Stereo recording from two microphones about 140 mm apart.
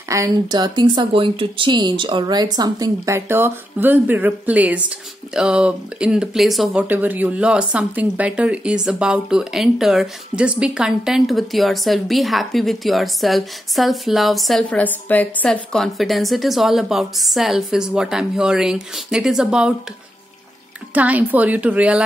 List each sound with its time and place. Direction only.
0.1 s speech: 20° right (ahead or behind)
0.6 s a woman's voice: 35° right (ahead or behind); by 14.6 s centre (ahead or behind)
14.6 s a woman's voice: 10° left (ahead or behind)
20.9 s speech: 10° right (ahead or behind)